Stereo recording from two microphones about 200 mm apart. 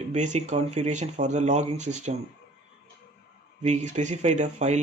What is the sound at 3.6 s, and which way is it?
Speech, 35° right (ahead or behind).